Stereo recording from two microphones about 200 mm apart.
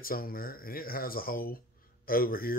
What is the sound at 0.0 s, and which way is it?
Speech, 45° left (ahead or behind).